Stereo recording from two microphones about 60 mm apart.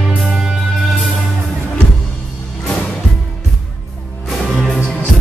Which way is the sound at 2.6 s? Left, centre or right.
Centre.